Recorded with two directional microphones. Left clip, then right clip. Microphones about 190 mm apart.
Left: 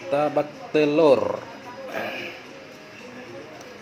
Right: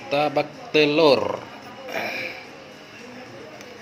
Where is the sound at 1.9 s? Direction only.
Centre (ahead or behind).